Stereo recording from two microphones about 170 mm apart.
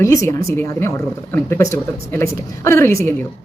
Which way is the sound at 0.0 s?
15° left (ahead or behind).